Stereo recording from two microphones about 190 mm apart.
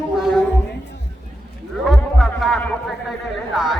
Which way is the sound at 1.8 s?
Centre (ahead or behind).